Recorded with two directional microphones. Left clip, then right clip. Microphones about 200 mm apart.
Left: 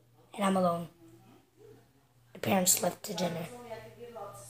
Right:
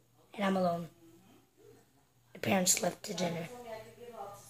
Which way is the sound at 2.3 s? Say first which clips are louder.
Left 2 dB; 10° right (ahead or behind).